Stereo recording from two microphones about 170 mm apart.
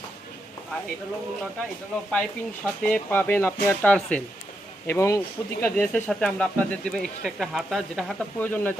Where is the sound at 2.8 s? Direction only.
10° left (ahead or behind).